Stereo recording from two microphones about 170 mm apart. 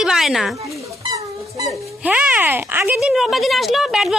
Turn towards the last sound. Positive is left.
turn(degrees=0)  # may be behind; listen again after turning